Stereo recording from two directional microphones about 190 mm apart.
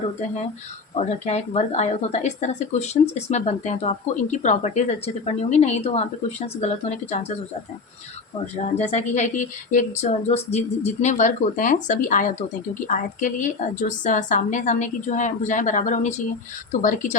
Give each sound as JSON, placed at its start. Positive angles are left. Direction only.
{"t": 0.9, "sound": "speech", "side_deg": 35}
{"t": 8.5, "sound": "a woman's voice", "side_deg": 35}